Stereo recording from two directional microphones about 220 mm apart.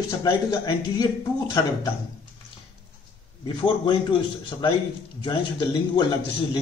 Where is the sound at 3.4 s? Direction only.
20° left (ahead or behind).